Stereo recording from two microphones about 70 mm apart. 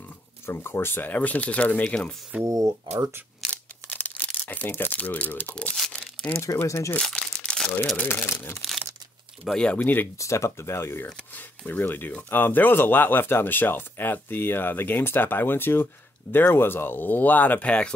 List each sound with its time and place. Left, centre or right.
0.5 s speech: left
2.4 s speech: right
3.8 s speech: left
6.3 s speech: left
7.0 s crumpling: centre
8.0 s speech: left
9.5 s speech: centre
10.1 s speech: left
11.3 s speech: left